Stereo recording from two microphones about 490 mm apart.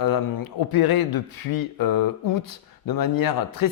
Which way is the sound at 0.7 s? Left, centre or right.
Left.